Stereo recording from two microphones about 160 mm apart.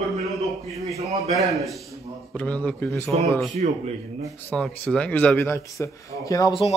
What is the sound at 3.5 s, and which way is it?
Speech, 45° right (ahead or behind).